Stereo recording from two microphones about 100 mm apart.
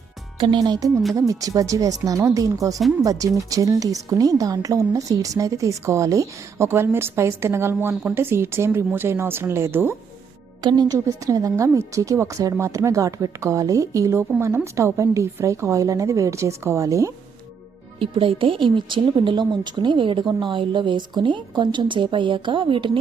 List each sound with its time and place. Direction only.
0.3 s speech: 55° right (ahead or behind)
0.6 s a woman's voice: 35° right (ahead or behind)
10.6 s a woman's voice: 45° right (ahead or behind)
18.0 s speech: 60° right (ahead or behind)